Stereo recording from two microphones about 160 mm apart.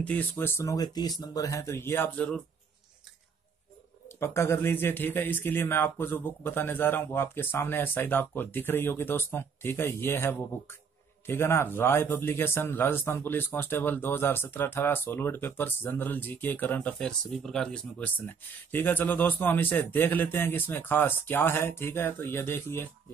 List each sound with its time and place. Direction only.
0.0 s a man's voice: 10° left (ahead or behind)
4.2 s a man's voice: 15° left (ahead or behind)